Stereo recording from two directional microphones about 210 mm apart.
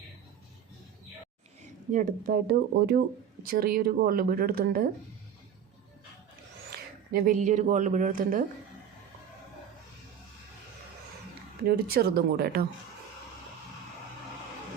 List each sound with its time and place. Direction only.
1.9 s speech: 40° right (ahead or behind)
6.7 s speech: 45° right (ahead or behind)
11.6 s speech: 45° right (ahead or behind)